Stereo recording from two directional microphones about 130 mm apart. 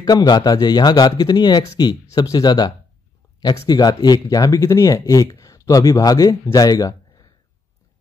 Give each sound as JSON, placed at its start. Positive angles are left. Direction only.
{"t": 0.0, "sound": "speech", "side_deg": 30}